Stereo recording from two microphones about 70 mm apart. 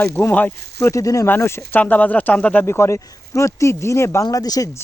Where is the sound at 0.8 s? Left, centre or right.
Left.